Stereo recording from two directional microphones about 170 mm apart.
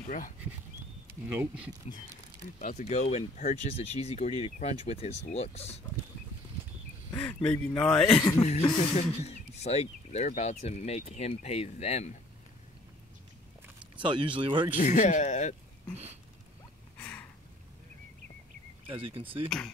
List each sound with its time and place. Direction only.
1.3 s speech: 10° right (ahead or behind)
2.6 s speech: 40° left (ahead or behind)
7.2 s speech: 10° left (ahead or behind)
8.1 s speech: 25° left (ahead or behind)
8.4 s speech: 35° left (ahead or behind)
13.9 s speech: 30° right (ahead or behind)
14.8 s speech: 50° left (ahead or behind)
17.0 s a sound: 10° left (ahead or behind)
18.9 s speech: 30° right (ahead or behind)